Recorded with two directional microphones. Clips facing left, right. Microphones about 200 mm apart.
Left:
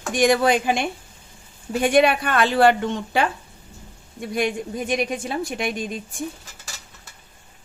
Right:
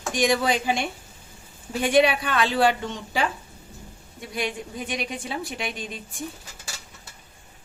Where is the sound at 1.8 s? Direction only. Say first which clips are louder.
Left 2 dB; 50° left (ahead or behind).